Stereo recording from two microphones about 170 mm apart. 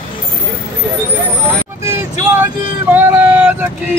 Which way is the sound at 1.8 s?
15° right (ahead or behind).